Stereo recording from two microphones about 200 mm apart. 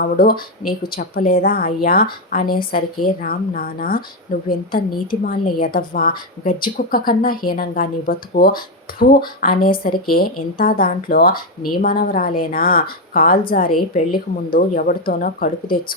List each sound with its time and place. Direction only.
0.0 s a woman's voice: 45° left (ahead or behind)
5.2 s a woman's voice: 45° left (ahead or behind)